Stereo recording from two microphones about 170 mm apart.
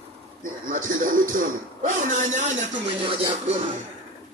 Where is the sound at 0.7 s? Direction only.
50° right (ahead or behind).